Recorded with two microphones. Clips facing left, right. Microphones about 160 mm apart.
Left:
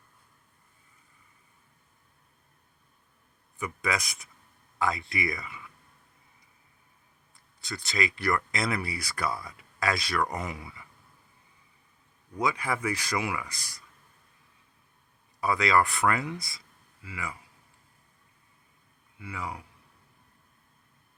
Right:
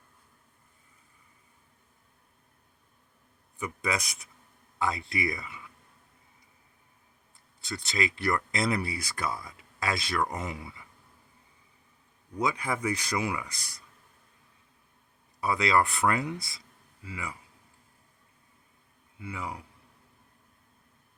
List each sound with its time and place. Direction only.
3.6 s speech: 30° right (ahead or behind)
7.6 s speech: 25° right (ahead or behind)
12.5 s speech: 25° right (ahead or behind)
15.4 s speech: 25° right (ahead or behind)
19.2 s speech: 25° right (ahead or behind)